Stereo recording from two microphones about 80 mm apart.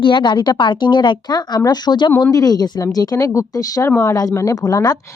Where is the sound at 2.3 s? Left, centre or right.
Left.